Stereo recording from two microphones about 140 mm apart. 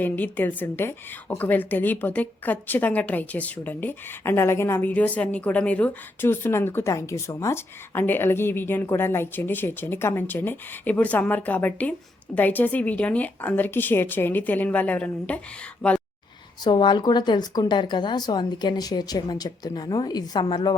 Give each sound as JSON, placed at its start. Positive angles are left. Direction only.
{"t": 0.0, "sound": "a woman's voice", "side_deg": 15}
{"t": 16.6, "sound": "speech", "side_deg": 30}